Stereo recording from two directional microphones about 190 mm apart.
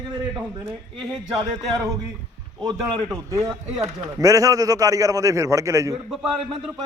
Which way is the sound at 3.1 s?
15° right (ahead or behind).